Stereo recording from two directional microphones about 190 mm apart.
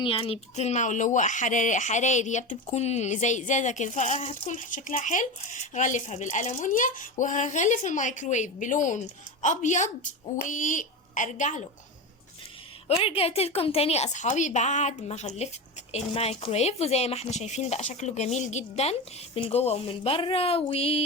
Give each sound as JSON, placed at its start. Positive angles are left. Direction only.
{"t": 0.0, "sound": "speech", "side_deg": 30}
{"t": 13.0, "sound": "speech", "side_deg": 30}